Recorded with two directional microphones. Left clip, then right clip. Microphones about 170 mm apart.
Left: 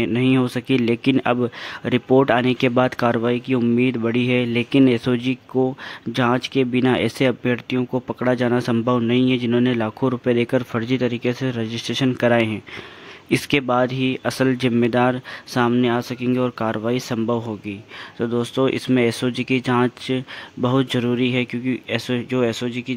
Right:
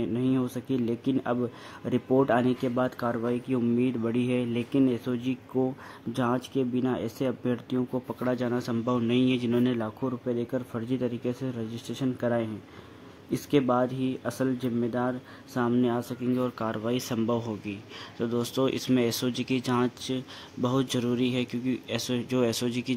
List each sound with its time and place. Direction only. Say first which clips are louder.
0.0 s speech: left 9 dB; 15° left (ahead or behind)